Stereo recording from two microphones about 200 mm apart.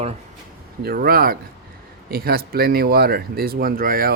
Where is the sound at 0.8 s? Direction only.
50° right (ahead or behind).